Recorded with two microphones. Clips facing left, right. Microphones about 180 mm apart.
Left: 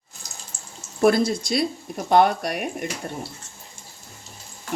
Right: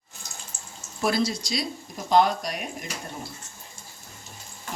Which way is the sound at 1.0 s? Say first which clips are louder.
Left 7 dB; 55° left (ahead or behind).